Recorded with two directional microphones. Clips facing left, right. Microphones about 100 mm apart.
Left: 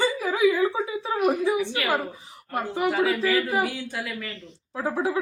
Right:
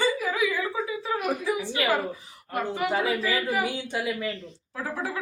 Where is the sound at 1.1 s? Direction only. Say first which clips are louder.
Left 2 dB; 30° left (ahead or behind).